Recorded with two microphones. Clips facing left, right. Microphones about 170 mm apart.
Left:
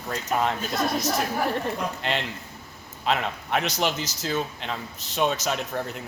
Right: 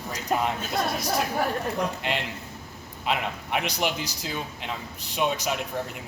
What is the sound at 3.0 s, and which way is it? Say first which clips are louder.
A man's voice: left 2 dB; 10° right (ahead or behind).